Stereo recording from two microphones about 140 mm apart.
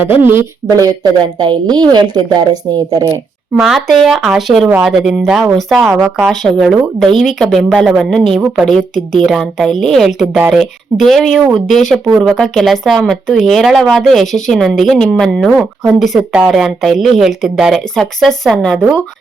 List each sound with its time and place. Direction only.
0.2 s a woman's voice: 15° right (ahead or behind)
3.5 s a woman's voice: centre (ahead or behind)
6.7 s a woman's voice: 10° right (ahead or behind)
7.2 s a woman's voice: centre (ahead or behind)